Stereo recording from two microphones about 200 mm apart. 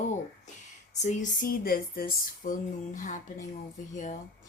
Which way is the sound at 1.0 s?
40° left (ahead or behind).